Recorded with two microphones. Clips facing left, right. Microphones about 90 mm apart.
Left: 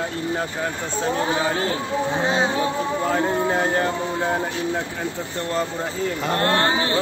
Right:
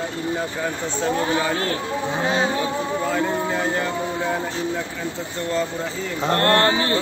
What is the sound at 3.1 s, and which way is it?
Music, 40° left (ahead or behind).